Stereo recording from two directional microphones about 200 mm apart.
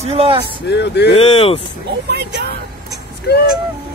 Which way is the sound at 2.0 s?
55° right (ahead or behind).